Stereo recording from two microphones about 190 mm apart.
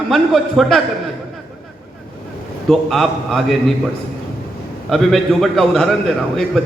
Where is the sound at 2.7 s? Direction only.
Centre (ahead or behind).